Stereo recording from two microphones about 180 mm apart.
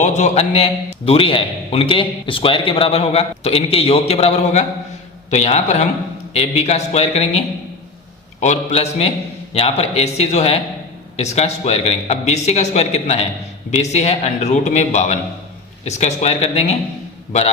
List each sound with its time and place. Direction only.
0.0 s a man's voice: 40° left (ahead or behind)